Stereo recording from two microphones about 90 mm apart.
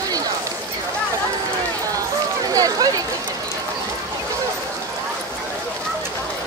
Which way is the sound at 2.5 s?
40° right (ahead or behind).